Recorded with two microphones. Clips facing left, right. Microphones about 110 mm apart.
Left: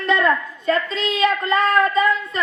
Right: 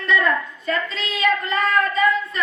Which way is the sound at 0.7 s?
30° left (ahead or behind).